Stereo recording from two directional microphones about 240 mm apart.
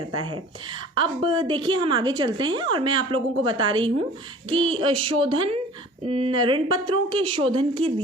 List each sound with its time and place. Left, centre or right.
0.9 s a woman's voice: centre